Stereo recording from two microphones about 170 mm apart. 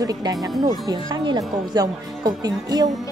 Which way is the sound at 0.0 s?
20° right (ahead or behind).